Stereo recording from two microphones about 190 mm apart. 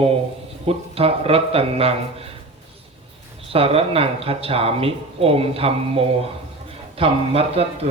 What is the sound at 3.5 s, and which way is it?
Speech, 30° right (ahead or behind).